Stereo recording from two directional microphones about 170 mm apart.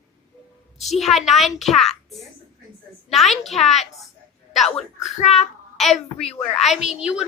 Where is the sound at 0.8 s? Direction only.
Centre (ahead or behind).